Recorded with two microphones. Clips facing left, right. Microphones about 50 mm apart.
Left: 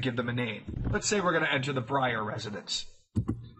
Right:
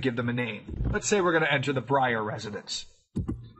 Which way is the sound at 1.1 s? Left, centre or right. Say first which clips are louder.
Right 4 dB; right.